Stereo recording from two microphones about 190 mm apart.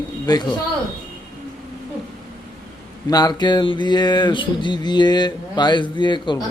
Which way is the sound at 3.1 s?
20° left (ahead or behind).